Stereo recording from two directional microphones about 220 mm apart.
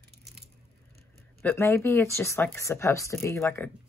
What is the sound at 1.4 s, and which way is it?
Speech, 10° left (ahead or behind).